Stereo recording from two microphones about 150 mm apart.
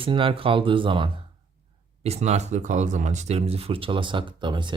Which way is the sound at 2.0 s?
45° right (ahead or behind).